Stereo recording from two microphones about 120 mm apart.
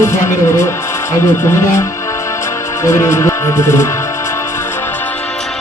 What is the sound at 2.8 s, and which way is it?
Music, 25° left (ahead or behind).